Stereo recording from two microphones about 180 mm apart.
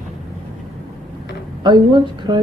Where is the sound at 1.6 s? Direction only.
25° right (ahead or behind).